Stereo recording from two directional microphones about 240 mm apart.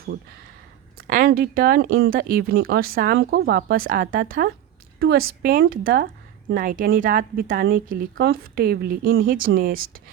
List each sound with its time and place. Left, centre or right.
0.9 s a woman's voice: right